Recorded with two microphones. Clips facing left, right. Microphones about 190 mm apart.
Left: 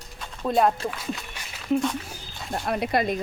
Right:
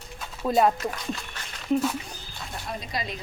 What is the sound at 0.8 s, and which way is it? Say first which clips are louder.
Speech: even; centre (ahead or behind).